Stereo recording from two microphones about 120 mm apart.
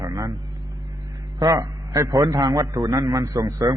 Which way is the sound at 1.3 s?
30° right (ahead or behind).